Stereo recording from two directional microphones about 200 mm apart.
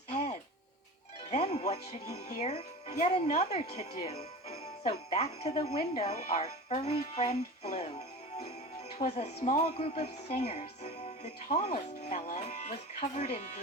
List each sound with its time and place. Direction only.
1.3 s speech: 35° left (ahead or behind)